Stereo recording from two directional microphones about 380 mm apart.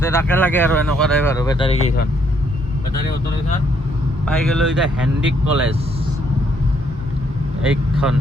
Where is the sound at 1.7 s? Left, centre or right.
Left.